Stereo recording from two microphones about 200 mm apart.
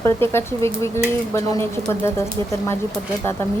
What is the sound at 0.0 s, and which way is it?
Speech, 10° left (ahead or behind).